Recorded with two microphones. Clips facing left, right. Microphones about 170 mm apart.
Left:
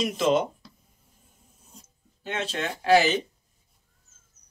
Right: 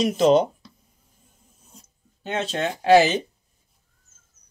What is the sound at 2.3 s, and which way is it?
Speech, 35° right (ahead or behind).